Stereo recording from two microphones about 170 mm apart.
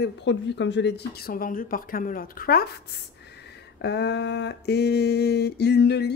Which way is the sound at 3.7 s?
80° left.